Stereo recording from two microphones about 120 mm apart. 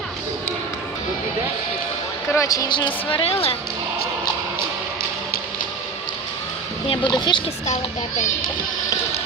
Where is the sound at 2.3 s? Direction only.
25° left (ahead or behind).